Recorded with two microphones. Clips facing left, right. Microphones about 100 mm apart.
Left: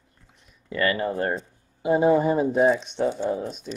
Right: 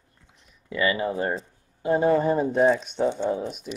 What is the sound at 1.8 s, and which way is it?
Speech, 10° left (ahead or behind).